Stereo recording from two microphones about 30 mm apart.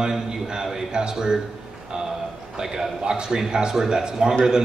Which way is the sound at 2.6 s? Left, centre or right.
Right.